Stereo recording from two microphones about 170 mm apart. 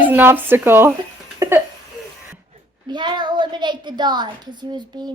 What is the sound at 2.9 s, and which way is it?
A child's voice, 25° right (ahead or behind).